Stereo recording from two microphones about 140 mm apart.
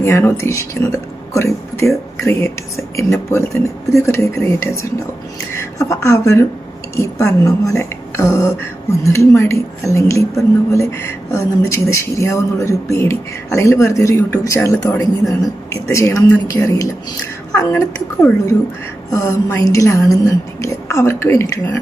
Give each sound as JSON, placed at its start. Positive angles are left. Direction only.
{"t": 0.0, "sound": "a woman's voice", "side_deg": 20}